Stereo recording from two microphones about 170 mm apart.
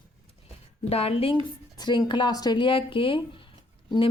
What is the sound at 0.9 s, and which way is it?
A woman's voice, 35° left (ahead or behind).